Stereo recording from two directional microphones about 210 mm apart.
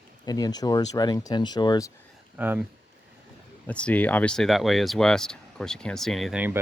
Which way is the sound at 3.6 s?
5° left (ahead or behind).